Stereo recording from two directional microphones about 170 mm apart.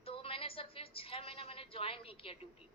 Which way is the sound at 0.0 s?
35° left (ahead or behind).